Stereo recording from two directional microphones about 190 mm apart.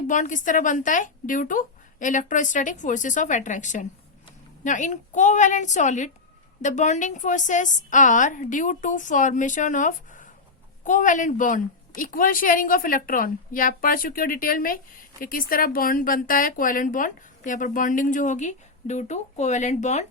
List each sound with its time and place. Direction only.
0.1 s speech: 40° left (ahead or behind)